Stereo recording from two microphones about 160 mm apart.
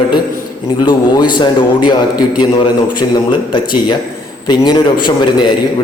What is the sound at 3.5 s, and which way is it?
Speech, 30° left (ahead or behind).